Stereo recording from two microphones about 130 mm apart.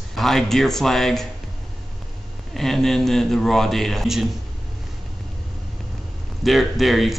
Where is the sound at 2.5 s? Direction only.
Centre (ahead or behind).